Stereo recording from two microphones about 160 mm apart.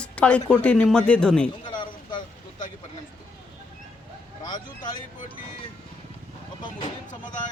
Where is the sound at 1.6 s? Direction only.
30° left (ahead or behind).